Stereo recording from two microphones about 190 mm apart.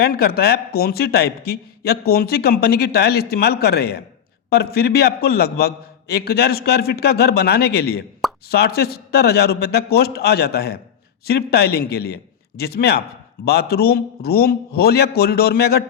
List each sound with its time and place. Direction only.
0.0 s speech: 55° left (ahead or behind)